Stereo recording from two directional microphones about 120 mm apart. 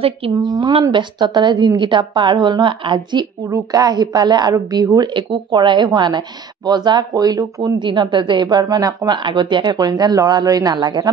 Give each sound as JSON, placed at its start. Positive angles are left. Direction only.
{"t": 0.4, "sound": "speech", "side_deg": -35}
{"t": 3.4, "sound": "speech", "side_deg": -30}